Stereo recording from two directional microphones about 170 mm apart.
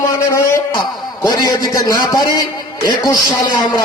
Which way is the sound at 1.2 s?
25° left (ahead or behind).